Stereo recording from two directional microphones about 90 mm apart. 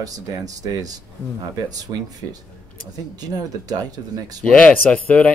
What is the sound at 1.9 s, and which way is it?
Speech, 45° right (ahead or behind).